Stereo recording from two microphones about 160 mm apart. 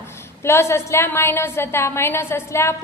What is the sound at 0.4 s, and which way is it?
A woman's voice, 15° left (ahead or behind).